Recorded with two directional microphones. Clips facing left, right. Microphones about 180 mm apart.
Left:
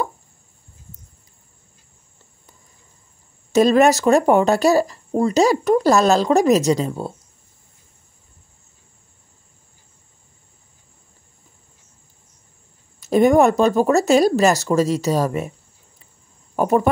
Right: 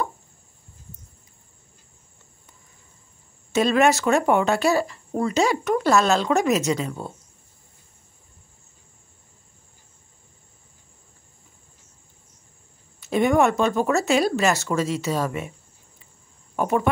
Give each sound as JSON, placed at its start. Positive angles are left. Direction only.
{"t": 3.5, "sound": "speech", "side_deg": 40}
{"t": 13.0, "sound": "speech", "side_deg": 40}
{"t": 16.5, "sound": "speech", "side_deg": 40}